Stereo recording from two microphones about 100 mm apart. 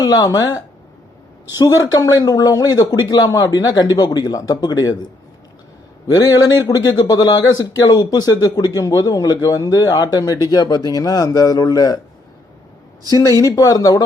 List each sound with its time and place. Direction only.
0.0 s a man's voice: 40° left (ahead or behind)
6.1 s a man's voice: 40° left (ahead or behind)
13.0 s a man's voice: 35° left (ahead or behind)